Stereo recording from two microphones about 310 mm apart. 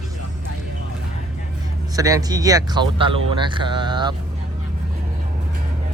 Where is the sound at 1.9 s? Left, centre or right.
Centre.